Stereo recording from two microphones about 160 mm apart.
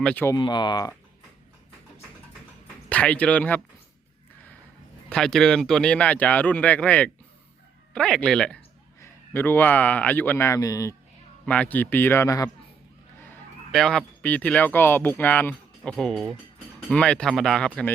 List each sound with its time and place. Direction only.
0.0 s speech: 10° left (ahead or behind)
0.3 s speech: 25° left (ahead or behind)
2.9 s speech: 10° left (ahead or behind)
5.0 s a man's voice: 5° left (ahead or behind); by 10.9 s 20° left (ahead or behind)
11.4 s speech: 10° left (ahead or behind)
13.7 s speech: centre (ahead or behind)